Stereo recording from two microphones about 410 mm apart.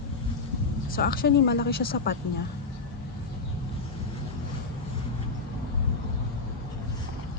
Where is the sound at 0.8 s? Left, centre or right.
Left.